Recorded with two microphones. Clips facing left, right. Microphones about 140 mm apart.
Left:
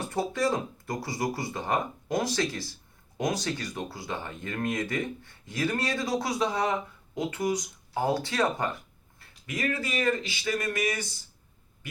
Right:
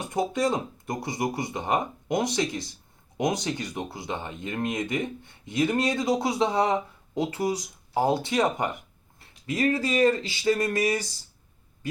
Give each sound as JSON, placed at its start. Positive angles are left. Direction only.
{"t": 0.0, "sound": "speech", "side_deg": -15}